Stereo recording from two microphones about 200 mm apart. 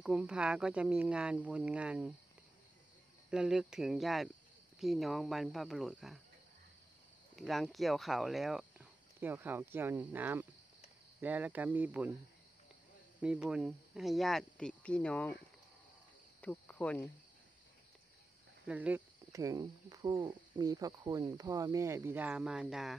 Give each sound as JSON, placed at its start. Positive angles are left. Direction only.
{"t": 0.0, "sound": "speech", "side_deg": -5}
{"t": 3.3, "sound": "speech", "side_deg": -5}
{"t": 7.3, "sound": "speech", "side_deg": 0}
{"t": 11.1, "sound": "cricket", "side_deg": -10}
{"t": 13.2, "sound": "speech", "side_deg": -5}
{"t": 16.3, "sound": "cricket", "side_deg": 5}
{"t": 18.7, "sound": "cricket", "side_deg": -5}